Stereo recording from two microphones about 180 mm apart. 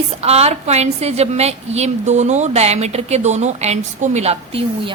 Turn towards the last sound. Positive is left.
turn(degrees=-35)  # may be behind; listen again after turning